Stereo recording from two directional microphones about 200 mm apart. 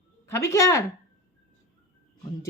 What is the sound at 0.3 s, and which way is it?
Speech, 15° left (ahead or behind).